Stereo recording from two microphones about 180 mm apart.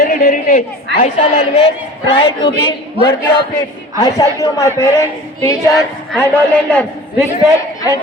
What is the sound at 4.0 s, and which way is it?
A woman's voice, 20° left (ahead or behind).